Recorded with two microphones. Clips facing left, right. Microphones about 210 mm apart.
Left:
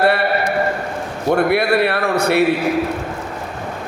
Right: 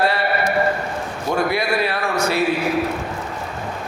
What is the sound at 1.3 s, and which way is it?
A man's voice, 60° left (ahead or behind).